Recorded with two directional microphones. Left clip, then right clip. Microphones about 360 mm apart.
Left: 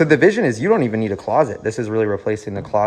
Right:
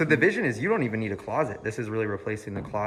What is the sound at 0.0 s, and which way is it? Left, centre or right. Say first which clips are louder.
Speech: left 9 dB; centre.